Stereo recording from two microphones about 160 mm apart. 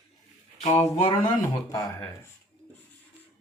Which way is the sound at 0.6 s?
40° left (ahead or behind).